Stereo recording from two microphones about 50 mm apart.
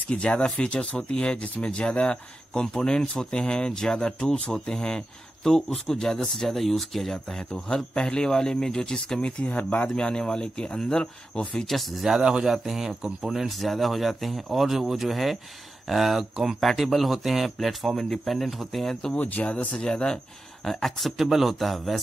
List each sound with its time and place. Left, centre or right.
0.1 s speech: left
9.5 s speech: left
9.9 s speech: centre
12.2 s speech: centre
12.5 s speech: centre
19.1 s speech: left
19.8 s speech: centre
20.6 s speech: centre